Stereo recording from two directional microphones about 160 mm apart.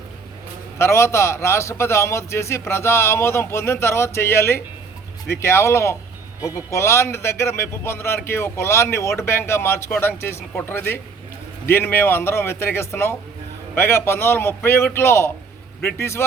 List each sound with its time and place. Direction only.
0.8 s speech: 15° left (ahead or behind)